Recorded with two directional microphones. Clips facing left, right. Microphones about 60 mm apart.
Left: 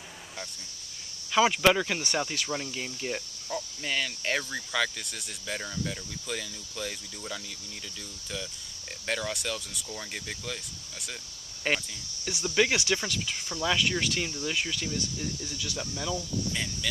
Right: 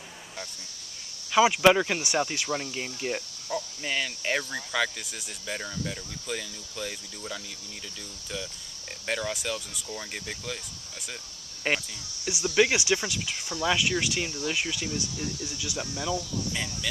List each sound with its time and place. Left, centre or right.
1.3 s speech: centre
9.0 s speech: centre